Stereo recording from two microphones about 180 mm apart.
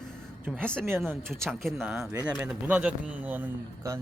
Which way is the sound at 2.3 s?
10° right (ahead or behind).